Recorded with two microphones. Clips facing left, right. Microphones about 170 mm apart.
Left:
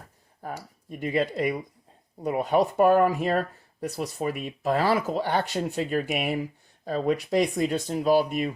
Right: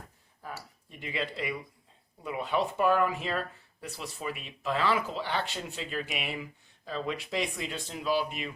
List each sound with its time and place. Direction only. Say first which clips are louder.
0.9 s speech: left 10 dB; 45° left (ahead or behind)